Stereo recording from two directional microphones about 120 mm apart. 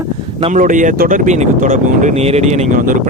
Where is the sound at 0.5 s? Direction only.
90° right.